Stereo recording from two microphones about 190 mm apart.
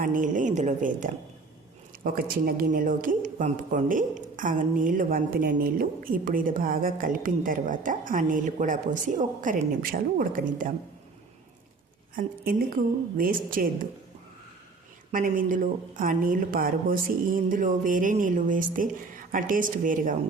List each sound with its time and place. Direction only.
0.0 s speech: 45° right (ahead or behind)
2.1 s speech: 50° right (ahead or behind)
12.1 s speech: 50° right (ahead or behind)
15.1 s speech: 45° right (ahead or behind)